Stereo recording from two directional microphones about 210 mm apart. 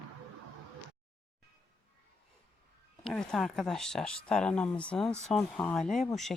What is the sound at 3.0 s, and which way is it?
Speech, centre (ahead or behind).